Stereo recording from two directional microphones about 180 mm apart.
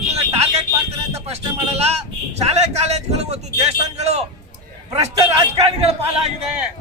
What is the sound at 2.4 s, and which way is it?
A man's voice, 35° right (ahead or behind).